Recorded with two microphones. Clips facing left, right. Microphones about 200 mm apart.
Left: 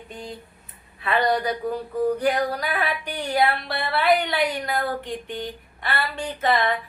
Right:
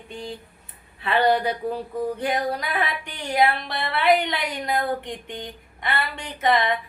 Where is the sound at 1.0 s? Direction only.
30° right (ahead or behind).